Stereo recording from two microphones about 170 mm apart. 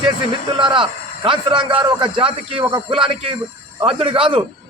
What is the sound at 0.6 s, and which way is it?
A man's voice, 30° right (ahead or behind).